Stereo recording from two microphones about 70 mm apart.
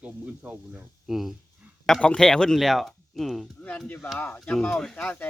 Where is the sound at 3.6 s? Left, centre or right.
Centre.